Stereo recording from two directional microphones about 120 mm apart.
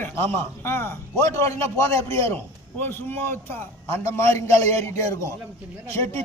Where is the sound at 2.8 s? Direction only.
20° left (ahead or behind).